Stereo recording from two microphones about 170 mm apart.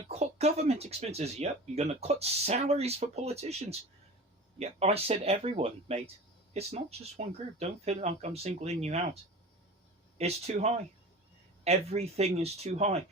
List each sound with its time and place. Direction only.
0.1 s speech: 40° right (ahead or behind)
10.2 s speech: 40° right (ahead or behind)